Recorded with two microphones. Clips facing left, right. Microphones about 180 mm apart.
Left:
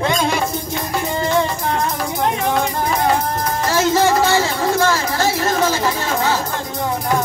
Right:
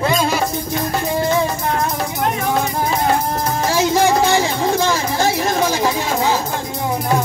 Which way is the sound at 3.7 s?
15° right (ahead or behind).